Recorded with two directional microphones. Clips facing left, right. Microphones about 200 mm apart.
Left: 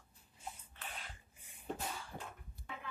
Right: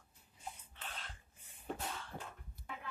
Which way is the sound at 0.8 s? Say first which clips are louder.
Even; 10° left (ahead or behind).